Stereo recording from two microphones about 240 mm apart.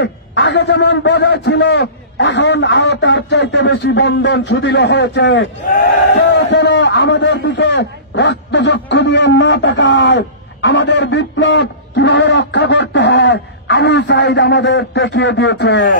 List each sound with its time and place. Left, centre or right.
0.0 s a man's voice: left